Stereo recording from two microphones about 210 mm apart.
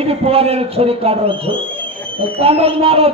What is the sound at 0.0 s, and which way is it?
A man's voice, 30° right (ahead or behind).